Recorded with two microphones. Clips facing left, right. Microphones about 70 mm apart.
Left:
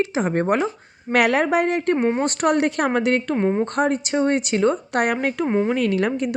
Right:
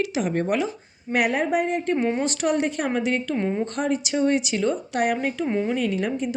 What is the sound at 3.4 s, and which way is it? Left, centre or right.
Speech, left.